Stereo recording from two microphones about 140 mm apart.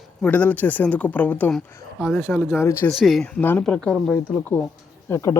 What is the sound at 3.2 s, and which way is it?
Speech, 15° left (ahead or behind).